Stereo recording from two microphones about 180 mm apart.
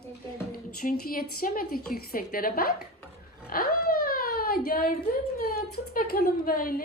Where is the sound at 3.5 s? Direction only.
55° left (ahead or behind).